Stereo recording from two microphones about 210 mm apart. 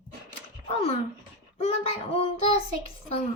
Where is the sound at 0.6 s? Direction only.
25° left (ahead or behind).